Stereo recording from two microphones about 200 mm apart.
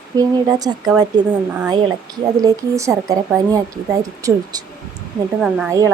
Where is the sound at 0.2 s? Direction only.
20° right (ahead or behind).